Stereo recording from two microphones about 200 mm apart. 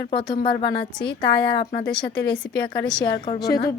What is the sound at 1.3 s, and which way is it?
Speech, 55° left (ahead or behind).